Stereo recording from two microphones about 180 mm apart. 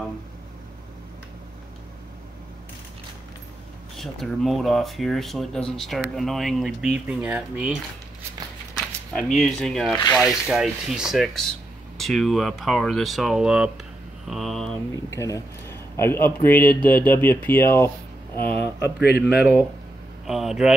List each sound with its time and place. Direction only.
3.9 s speech: centre (ahead or behind)
9.1 s speech: centre (ahead or behind)
15.1 s a man's voice: 15° left (ahead or behind)
18.6 s speech: 65° left (ahead or behind)
19.2 s speech: 5° right (ahead or behind)